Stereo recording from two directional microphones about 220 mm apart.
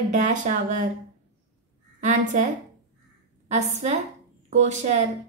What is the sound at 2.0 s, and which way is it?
Speech, 35° right (ahead or behind).